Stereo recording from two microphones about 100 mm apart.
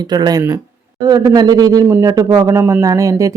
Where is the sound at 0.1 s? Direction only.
45° right (ahead or behind).